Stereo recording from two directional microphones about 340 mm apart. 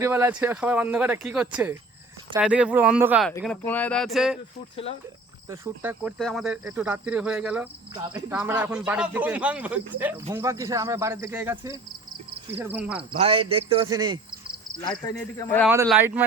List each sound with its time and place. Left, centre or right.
0.0 s speech: centre
5.5 s speech: centre
13.0 s speech: centre
15.0 s speech: centre
15.7 s speech: centre